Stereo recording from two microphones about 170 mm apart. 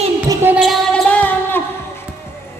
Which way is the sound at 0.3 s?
10° right (ahead or behind).